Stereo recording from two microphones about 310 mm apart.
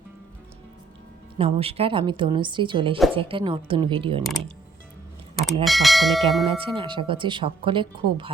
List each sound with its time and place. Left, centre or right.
1.4 s speech: centre
5.6 s bell: centre
6.5 s speech: centre